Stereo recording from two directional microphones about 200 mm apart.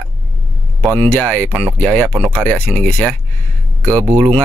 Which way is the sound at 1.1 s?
5° left (ahead or behind).